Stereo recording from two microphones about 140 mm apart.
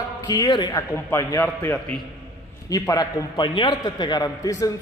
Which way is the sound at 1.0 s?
15° left (ahead or behind).